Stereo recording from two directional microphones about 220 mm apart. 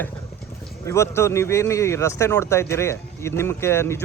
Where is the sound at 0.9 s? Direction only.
10° left (ahead or behind).